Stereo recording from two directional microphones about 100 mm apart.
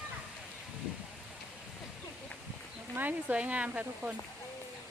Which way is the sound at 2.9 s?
15° right (ahead or behind).